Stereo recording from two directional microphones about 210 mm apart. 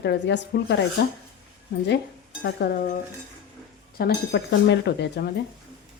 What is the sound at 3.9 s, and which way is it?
A woman's voice, 50° left (ahead or behind).